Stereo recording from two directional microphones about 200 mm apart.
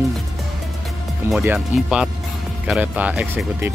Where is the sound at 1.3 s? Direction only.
5° right (ahead or behind).